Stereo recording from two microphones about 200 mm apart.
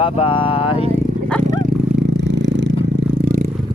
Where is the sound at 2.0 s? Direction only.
60° right (ahead or behind).